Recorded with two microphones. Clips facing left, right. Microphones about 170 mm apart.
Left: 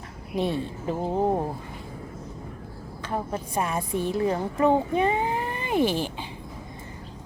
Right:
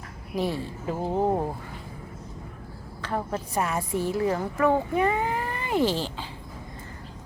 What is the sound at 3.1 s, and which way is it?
A woman's voice, 20° left (ahead or behind).